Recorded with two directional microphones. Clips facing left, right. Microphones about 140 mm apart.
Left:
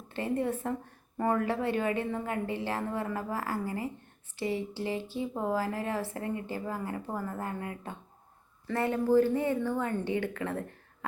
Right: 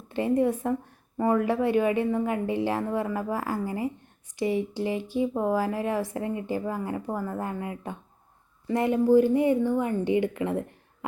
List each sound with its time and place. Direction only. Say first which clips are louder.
0.1 s speech: right 7 dB; 15° right (ahead or behind)